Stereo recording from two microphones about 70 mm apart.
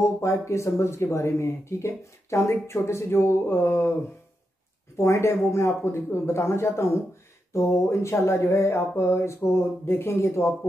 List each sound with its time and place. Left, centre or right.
0.0 s speech: left
4.9 s speech: left